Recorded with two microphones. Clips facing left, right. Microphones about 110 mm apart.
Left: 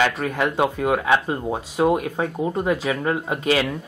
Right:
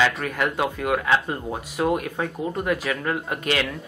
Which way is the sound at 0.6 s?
15° left (ahead or behind).